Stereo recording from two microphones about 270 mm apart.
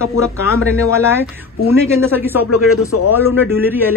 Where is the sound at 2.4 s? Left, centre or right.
Left.